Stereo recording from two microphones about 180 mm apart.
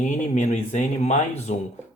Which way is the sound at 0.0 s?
40° left (ahead or behind).